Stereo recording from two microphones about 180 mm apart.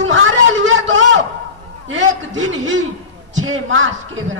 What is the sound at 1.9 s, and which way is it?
A man's voice, 90° right.